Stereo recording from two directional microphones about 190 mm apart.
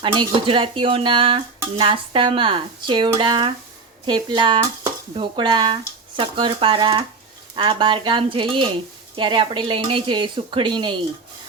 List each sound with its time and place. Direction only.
0.0 s speech: 25° right (ahead or behind)